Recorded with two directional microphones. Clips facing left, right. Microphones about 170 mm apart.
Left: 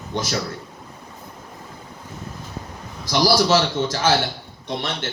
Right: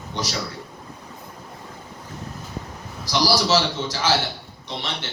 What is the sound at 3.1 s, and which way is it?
A man's voice, 50° left (ahead or behind).